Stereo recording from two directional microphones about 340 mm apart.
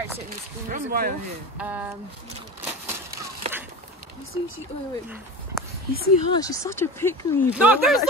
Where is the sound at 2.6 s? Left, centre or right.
Centre.